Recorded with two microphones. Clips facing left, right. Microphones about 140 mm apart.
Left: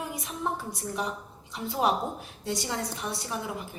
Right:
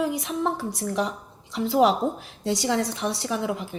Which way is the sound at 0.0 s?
85° right.